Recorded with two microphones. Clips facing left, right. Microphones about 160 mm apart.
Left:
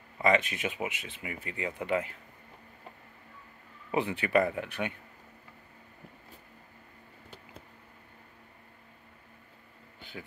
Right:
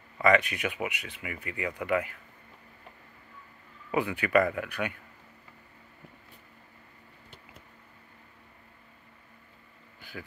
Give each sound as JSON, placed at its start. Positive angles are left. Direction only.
{"t": 0.2, "sound": "speech", "side_deg": 25}
{"t": 3.9, "sound": "speech", "side_deg": 25}
{"t": 9.9, "sound": "a sound", "side_deg": 25}